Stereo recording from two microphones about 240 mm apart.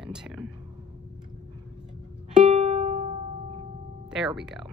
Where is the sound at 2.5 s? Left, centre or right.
Right.